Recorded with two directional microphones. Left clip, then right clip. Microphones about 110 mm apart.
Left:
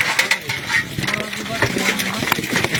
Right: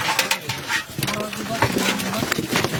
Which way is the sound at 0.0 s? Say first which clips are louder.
Left 4 dB; 15° right (ahead or behind).